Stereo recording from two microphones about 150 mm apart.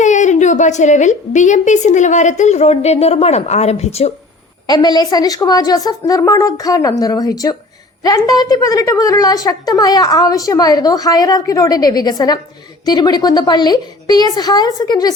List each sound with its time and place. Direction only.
0.0 s a woman's voice: 55° left (ahead or behind)
4.6 s a woman's voice: 25° left (ahead or behind)